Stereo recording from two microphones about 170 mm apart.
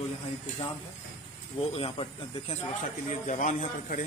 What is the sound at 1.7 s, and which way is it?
Speech, 30° left (ahead or behind).